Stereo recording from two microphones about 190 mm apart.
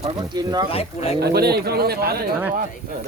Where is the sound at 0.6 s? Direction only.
30° left (ahead or behind).